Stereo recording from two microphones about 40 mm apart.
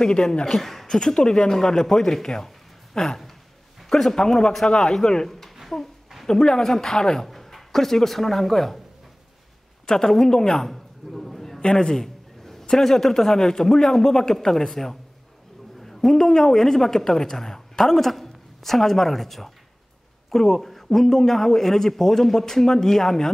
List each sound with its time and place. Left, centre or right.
0.0 s speech: centre
0.6 s a woman's voice: centre
0.8 s a man's voice: centre
4.6 s a man's voice: left
5.3 s a woman's voice: centre
7.2 s speech: centre
9.8 s a man's voice: centre
11.1 s a sound: centre
11.6 s a man's voice: centre